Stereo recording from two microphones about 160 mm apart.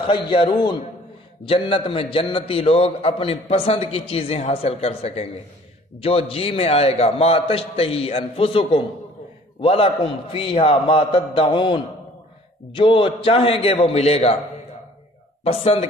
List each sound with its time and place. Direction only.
0.0 s a man's voice: 35° left (ahead or behind)
15.4 s a man's voice: 40° left (ahead or behind)